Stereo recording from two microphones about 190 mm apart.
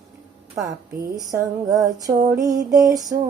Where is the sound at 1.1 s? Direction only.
20° right (ahead or behind).